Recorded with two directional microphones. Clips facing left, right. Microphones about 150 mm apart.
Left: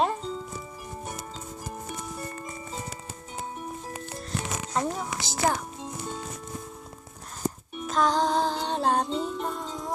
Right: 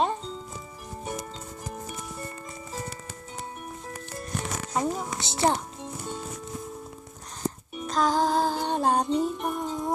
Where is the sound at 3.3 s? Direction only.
20° left (ahead or behind).